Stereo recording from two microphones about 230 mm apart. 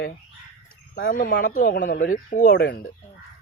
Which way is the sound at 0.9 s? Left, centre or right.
Left.